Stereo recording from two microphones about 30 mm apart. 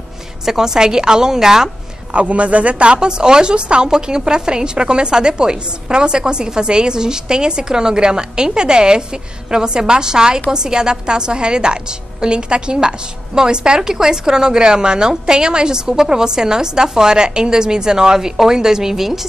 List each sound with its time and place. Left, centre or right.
0.5 s a woman's voice: centre
2.3 s speech: right
3.5 s speech: right
3.8 s a woman's voice: right